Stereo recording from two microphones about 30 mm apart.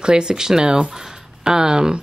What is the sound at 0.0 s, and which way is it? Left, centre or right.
Speech, right.